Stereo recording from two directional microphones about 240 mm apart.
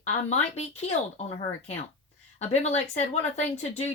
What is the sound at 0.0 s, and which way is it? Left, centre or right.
Speech, left.